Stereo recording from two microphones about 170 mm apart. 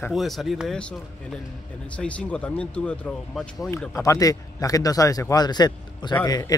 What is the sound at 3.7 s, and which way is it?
Speech, 15° left (ahead or behind).